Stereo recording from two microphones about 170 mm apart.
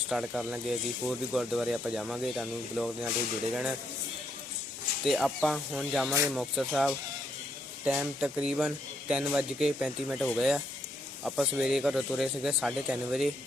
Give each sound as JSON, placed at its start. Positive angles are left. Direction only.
{"t": 0.1, "sound": "speech", "side_deg": -5}
{"t": 5.0, "sound": "speech", "side_deg": 0}